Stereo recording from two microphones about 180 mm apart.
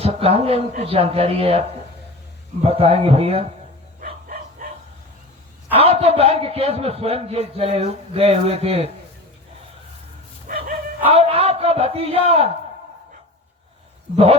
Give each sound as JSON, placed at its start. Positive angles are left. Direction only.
{"t": 0.0, "sound": "a man's voice", "side_deg": -35}
{"t": 4.0, "sound": "bow-wow", "side_deg": -50}
{"t": 5.7, "sound": "a man's voice", "side_deg": -35}
{"t": 10.4, "sound": "bow-wow", "side_deg": -50}
{"t": 11.0, "sound": "a man's voice", "side_deg": -35}